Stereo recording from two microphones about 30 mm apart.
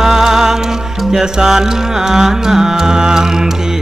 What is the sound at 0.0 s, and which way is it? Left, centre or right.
Music, centre.